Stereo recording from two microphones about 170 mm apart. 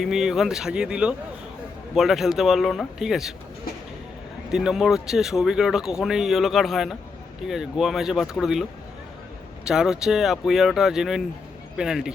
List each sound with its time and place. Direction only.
0.0 s speech: centre (ahead or behind)
4.5 s speech: centre (ahead or behind)
9.6 s speech: 5° right (ahead or behind)